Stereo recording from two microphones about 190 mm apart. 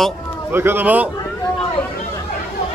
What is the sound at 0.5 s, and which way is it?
Speech, 10° right (ahead or behind).